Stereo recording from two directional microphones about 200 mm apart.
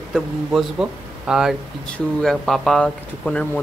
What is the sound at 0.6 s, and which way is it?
Speech, 5° right (ahead or behind).